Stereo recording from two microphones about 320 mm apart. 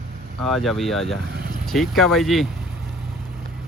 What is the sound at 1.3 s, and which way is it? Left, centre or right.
Vehicle, right.